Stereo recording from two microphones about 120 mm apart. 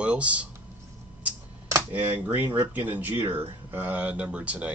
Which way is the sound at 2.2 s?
15° right (ahead or behind).